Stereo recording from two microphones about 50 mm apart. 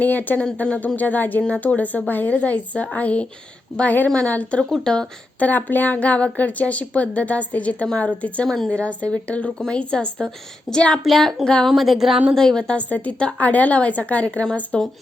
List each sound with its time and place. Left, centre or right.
0.0 s a woman's voice: left
4.8 s a woman's voice: centre
5.4 s a woman's voice: left
8.4 s speech: centre
8.7 s a woman's voice: left
11.0 s speech: centre
12.3 s a woman's voice: centre
12.7 s a woman's voice: left